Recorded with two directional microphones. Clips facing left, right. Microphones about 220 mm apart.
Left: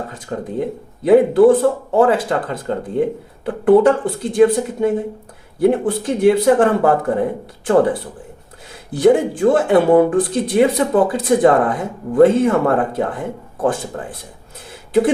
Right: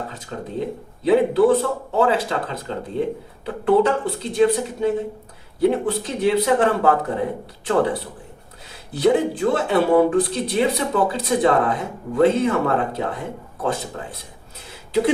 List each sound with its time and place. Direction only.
1.0 s speech: 50° left (ahead or behind)